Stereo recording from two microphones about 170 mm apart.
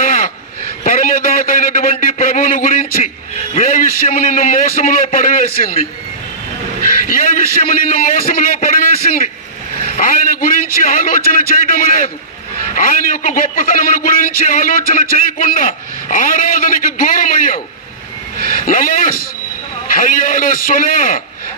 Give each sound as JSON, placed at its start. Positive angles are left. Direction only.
{"t": 0.8, "sound": "a man's voice", "side_deg": 50}
{"t": 7.1, "sound": "a man's voice", "side_deg": 55}
{"t": 18.7, "sound": "a man's voice", "side_deg": 55}